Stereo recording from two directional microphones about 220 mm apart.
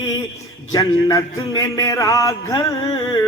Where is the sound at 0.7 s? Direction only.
15° left (ahead or behind).